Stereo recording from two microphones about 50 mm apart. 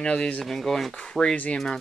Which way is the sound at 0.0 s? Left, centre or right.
Left.